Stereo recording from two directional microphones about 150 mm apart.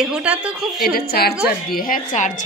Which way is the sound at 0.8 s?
90° left.